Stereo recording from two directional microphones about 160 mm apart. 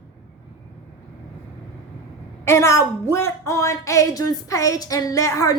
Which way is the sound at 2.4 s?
15° left (ahead or behind).